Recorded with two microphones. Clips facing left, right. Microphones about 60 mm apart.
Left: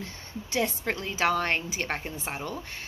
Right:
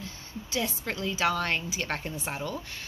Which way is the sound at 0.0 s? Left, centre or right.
Left.